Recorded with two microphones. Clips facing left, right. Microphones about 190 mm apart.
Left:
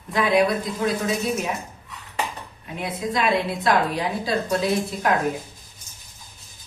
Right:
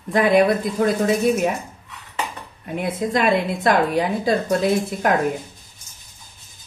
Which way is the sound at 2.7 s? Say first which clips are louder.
Right 5 dB; 50° right (ahead or behind).